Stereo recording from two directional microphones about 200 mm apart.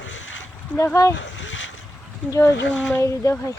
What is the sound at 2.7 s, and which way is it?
Speech, centre (ahead or behind).